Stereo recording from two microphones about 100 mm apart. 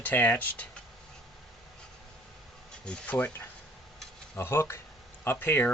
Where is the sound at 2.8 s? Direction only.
15° left (ahead or behind).